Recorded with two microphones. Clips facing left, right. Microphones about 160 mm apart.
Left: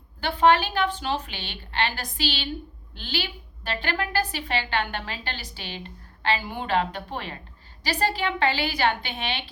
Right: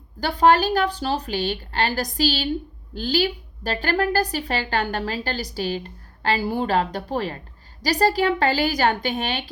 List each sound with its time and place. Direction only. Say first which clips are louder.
0.2 s a woman's voice: right 3 dB; 40° right (ahead or behind)